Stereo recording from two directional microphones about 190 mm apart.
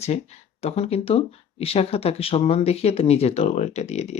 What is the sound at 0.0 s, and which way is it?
Speech, 35° left (ahead or behind).